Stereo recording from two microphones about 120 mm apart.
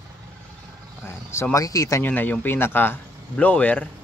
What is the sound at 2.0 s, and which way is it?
Speech, 15° left (ahead or behind).